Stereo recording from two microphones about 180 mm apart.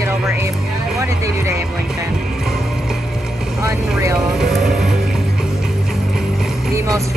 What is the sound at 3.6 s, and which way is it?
Speech, 15° right (ahead or behind).